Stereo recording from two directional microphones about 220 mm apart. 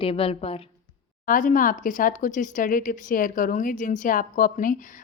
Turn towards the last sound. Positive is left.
turn(degrees=40)  # may be behind; listen again after turning